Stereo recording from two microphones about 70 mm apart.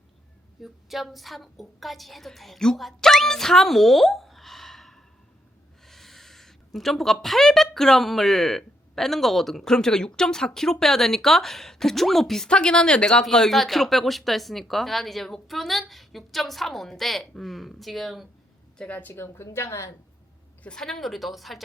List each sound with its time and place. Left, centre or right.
0.6 s speech: centre
18.9 s speech: left
20.7 s speech: centre